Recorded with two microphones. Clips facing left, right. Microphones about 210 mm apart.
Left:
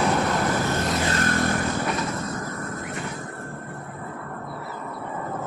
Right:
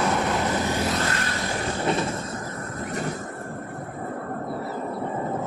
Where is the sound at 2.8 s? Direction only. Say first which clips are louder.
Right 3 dB; 40° right (ahead or behind).